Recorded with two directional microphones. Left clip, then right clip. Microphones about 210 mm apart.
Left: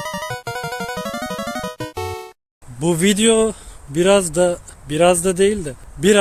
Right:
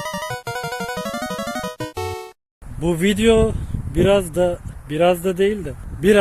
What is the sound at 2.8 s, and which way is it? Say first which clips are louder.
Speech: left 1 dB; 5° left (ahead or behind).